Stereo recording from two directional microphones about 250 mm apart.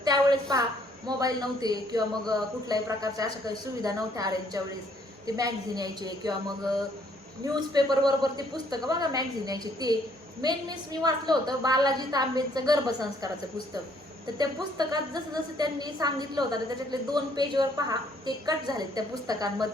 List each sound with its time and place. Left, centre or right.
0.0 s a sound: centre
1.0 s a woman's voice: centre
14.3 s a woman's voice: centre